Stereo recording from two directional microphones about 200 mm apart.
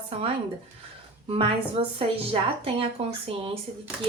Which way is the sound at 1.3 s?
30° right (ahead or behind).